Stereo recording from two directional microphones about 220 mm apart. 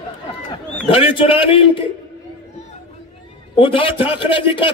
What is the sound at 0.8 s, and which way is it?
A man's voice, 25° left (ahead or behind).